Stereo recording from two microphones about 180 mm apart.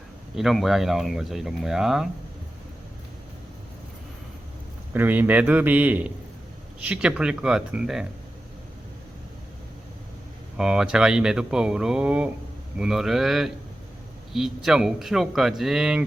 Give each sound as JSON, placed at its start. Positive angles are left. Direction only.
{"t": 0.3, "sound": "speech", "side_deg": 0}
{"t": 4.9, "sound": "a man's voice", "side_deg": -10}
{"t": 10.6, "sound": "speech", "side_deg": -5}